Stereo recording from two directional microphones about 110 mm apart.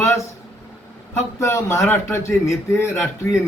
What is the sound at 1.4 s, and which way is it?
Speech, 25° left (ahead or behind).